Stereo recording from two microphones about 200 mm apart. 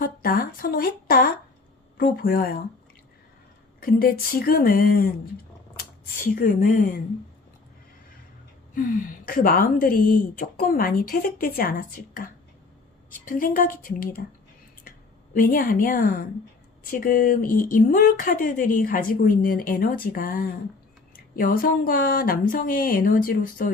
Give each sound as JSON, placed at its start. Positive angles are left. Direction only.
{"t": 0.0, "sound": "a sound", "side_deg": 45}
{"t": 2.0, "sound": "speech", "side_deg": 45}
{"t": 3.8, "sound": "speech", "side_deg": 45}
{"t": 6.1, "sound": "speech", "side_deg": 45}
{"t": 8.7, "sound": "speech", "side_deg": 40}